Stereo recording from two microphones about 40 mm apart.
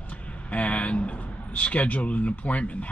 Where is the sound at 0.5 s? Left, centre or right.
Left.